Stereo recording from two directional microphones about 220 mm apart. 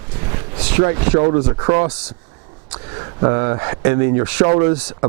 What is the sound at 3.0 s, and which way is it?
Speech, 20° right (ahead or behind).